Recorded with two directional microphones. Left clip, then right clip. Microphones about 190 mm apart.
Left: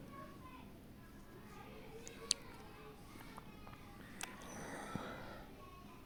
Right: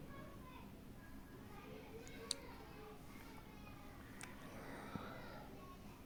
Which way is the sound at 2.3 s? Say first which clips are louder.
Left 7 dB; 20° left (ahead or behind).